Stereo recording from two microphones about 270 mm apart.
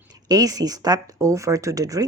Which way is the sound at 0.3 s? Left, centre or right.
Centre.